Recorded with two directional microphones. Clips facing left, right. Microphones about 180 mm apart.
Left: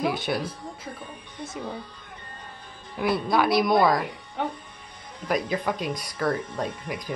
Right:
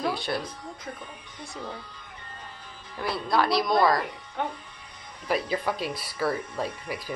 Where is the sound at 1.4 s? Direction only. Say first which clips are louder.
Left 4 dB; 20° left (ahead or behind).